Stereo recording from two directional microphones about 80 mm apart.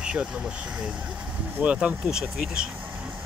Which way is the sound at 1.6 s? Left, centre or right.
Centre.